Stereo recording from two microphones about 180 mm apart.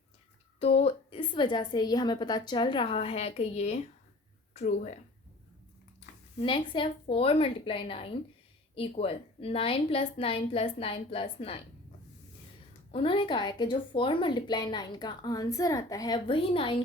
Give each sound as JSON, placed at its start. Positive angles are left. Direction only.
{"t": 0.6, "sound": "a woman's voice", "side_deg": 35}
{"t": 6.4, "sound": "a woman's voice", "side_deg": 30}
{"t": 12.9, "sound": "speech", "side_deg": 30}